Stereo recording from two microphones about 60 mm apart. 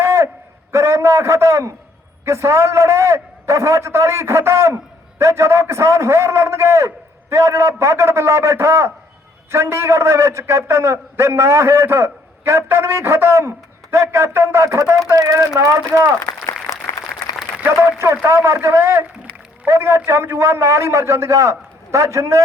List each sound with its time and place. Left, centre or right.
0.0 s a sound: right
0.7 s a man's voice: right
17.7 s a man's voice: right